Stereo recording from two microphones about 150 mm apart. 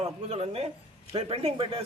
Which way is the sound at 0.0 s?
40° right (ahead or behind).